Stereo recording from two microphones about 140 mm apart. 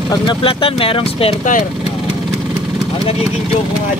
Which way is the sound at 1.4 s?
65° left (ahead or behind).